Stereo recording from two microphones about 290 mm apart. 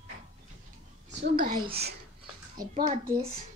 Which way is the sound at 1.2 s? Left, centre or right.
Right.